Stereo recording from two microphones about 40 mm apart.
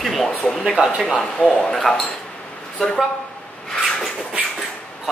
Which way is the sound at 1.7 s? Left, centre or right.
Centre.